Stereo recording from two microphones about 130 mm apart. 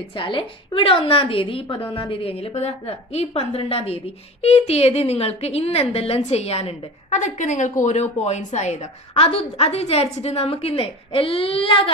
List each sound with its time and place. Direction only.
0.2 s a woman's voice: 40° left (ahead or behind)